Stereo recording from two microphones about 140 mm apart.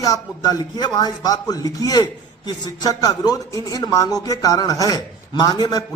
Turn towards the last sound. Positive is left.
turn(degrees=30)  # may be behind; listen again after turning